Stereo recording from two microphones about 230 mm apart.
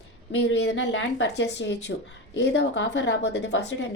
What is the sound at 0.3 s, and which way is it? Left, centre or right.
A woman's voice, left.